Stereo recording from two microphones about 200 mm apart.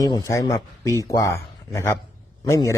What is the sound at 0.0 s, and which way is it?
A man's voice, 15° left (ahead or behind).